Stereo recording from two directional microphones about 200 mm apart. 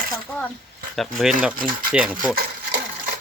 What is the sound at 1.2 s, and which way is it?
Speech, centre (ahead or behind).